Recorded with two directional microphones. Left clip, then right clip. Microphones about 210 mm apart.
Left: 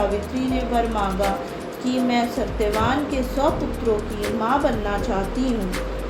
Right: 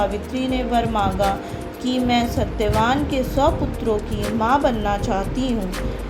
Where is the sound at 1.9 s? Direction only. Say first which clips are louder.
Right 2 dB; 35° right (ahead or behind).